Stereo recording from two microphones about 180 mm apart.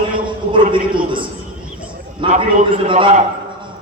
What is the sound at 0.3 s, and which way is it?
A man's voice, 25° right (ahead or behind).